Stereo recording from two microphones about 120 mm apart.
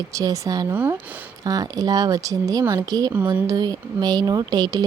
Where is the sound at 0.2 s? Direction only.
30° right (ahead or behind).